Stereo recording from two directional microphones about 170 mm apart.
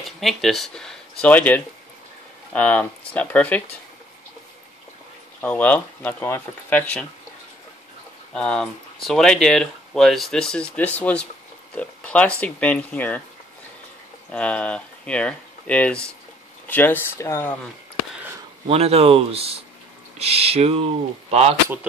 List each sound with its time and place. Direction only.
0.0 s speech: centre (ahead or behind)
5.4 s speech: 10° left (ahead or behind)
8.4 s speech: 5° left (ahead or behind)
14.3 s speech: 5° left (ahead or behind)
18.7 s speech: 35° right (ahead or behind)